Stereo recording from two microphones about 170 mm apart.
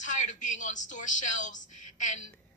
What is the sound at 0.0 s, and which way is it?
A woman's voice, 45° left (ahead or behind).